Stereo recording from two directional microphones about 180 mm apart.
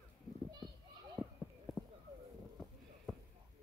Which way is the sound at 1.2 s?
Centre (ahead or behind).